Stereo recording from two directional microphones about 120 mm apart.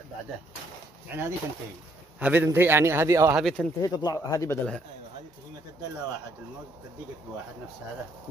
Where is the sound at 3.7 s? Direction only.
35° left (ahead or behind).